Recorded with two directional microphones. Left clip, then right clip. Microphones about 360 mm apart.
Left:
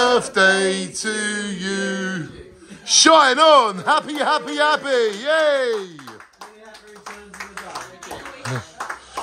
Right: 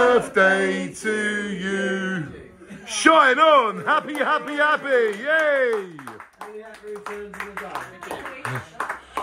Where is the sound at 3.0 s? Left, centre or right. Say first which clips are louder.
Left 2 dB; centre.